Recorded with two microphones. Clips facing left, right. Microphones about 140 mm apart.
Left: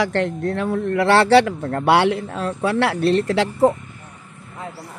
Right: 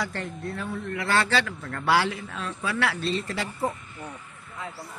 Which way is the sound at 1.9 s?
65° left (ahead or behind).